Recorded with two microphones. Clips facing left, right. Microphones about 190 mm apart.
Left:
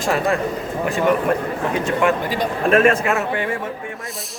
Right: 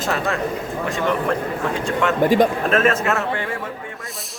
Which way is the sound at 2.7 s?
10° left (ahead or behind).